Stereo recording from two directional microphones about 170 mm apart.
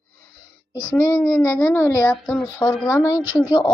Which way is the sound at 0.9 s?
15° left (ahead or behind).